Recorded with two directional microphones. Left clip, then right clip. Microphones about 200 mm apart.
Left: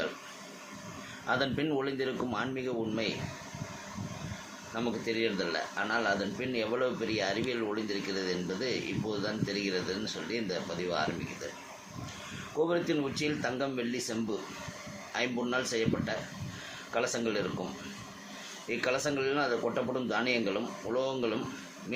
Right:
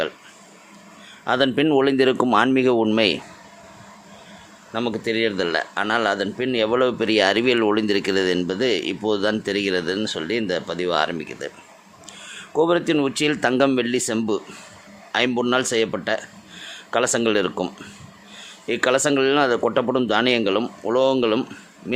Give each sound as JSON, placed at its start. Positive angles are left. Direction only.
{"t": 1.3, "sound": "speech", "side_deg": -50}
{"t": 4.7, "sound": "speech", "side_deg": -50}
{"t": 12.5, "sound": "speech", "side_deg": -55}
{"t": 18.7, "sound": "speech", "side_deg": -55}